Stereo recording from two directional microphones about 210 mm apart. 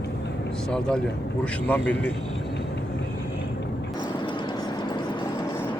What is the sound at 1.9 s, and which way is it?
Speech, 5° left (ahead or behind).